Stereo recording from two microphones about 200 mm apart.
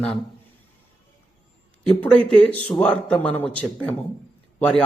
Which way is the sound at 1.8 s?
5° left (ahead or behind).